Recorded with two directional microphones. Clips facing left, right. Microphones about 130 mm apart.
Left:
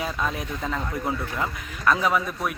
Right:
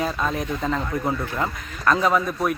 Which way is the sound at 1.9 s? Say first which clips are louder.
Right 3 dB; 5° left (ahead or behind).